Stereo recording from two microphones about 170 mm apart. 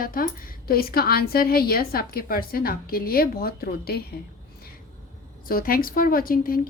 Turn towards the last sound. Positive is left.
turn(degrees=60)  # may be behind; listen again after turning